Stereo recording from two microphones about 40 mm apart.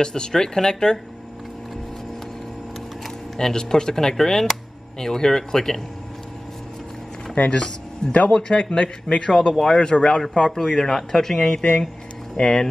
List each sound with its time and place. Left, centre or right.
0.0 s speech: centre
3.3 s speech: centre
7.4 s speech: left